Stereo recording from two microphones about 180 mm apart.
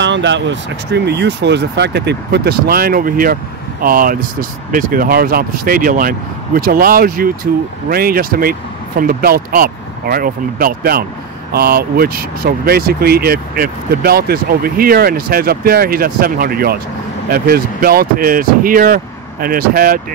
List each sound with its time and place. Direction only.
0.0 s speech: 85° right; by 20.0 s 55° right (ahead or behind)